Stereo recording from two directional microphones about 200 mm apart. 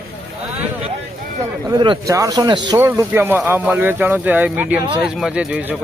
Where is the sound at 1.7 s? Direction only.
20° right (ahead or behind).